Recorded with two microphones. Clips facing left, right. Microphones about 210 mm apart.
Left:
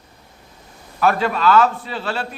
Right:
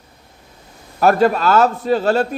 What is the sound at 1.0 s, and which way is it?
A man's voice, 40° right (ahead or behind).